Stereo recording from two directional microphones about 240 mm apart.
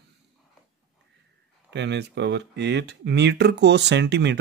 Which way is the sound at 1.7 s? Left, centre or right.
Right.